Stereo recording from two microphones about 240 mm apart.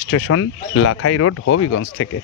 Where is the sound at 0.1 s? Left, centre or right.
Left.